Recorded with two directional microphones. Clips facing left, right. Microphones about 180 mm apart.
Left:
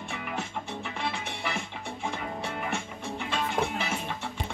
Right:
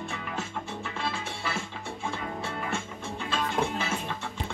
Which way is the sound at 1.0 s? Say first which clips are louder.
Even; 15° left (ahead or behind).